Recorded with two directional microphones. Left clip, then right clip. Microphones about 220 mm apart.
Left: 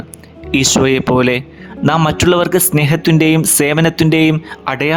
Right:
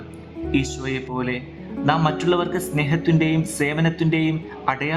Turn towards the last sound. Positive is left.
turn(degrees=45)  # may be behind; listen again after turning